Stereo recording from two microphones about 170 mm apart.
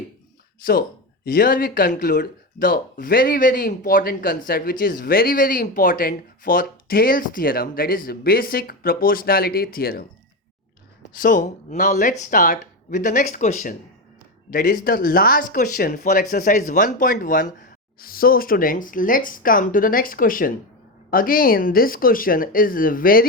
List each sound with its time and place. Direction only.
0.6 s speech: 60° left (ahead or behind)
11.1 s speech: 50° left (ahead or behind)
14.5 s speech: 55° left (ahead or behind)